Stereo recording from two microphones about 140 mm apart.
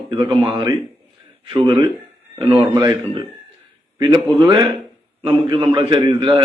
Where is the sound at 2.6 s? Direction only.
30° right (ahead or behind).